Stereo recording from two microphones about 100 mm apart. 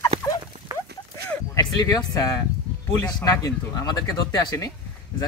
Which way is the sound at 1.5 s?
35° left (ahead or behind).